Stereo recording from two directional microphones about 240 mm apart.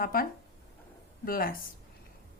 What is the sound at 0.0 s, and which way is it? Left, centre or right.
Speech, left.